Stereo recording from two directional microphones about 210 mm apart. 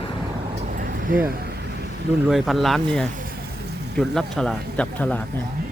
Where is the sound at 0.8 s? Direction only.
40° right (ahead or behind).